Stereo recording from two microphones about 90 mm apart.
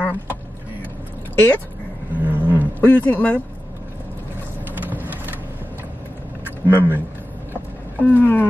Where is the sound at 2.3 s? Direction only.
20° right (ahead or behind).